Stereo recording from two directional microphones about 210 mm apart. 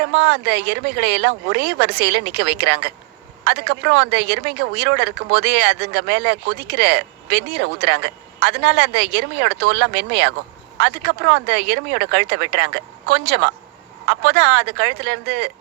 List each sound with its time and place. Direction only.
0.0 s speech: 55° right (ahead or behind)